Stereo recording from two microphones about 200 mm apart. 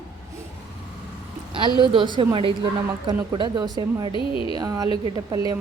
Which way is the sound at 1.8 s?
25° right (ahead or behind).